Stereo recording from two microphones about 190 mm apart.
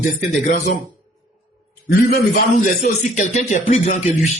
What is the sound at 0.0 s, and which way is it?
Speech, 40° left (ahead or behind).